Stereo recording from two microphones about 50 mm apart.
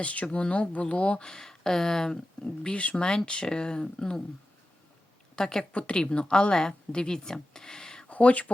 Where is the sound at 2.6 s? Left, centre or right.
Left.